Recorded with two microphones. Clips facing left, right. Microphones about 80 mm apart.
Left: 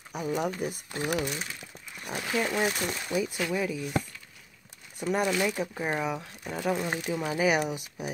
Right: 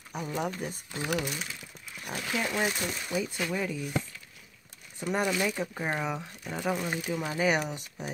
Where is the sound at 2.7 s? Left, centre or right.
Left.